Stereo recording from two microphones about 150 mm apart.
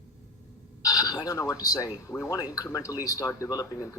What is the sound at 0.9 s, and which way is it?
Speech, 25° left (ahead or behind).